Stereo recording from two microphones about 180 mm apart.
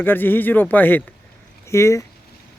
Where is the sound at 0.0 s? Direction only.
10° left (ahead or behind).